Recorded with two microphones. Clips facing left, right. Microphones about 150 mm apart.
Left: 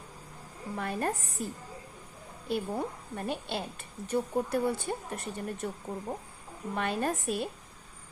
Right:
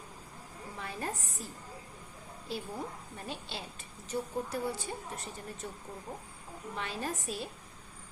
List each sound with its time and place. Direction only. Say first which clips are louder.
0.8 s a woman's voice: left 7 dB; 55° left (ahead or behind)
6.7 s a woman's voice: left 7 dB; 55° left (ahead or behind)